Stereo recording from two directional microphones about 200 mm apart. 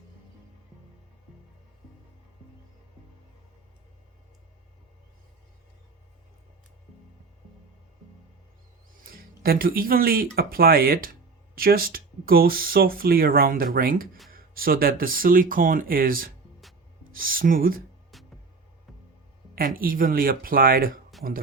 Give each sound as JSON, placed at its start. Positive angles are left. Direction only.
{"t": 9.1, "sound": "speech", "side_deg": -45}
{"t": 18.1, "sound": "music", "side_deg": 0}
{"t": 19.5, "sound": "speech", "side_deg": -45}
{"t": 21.1, "sound": "a sound", "side_deg": 0}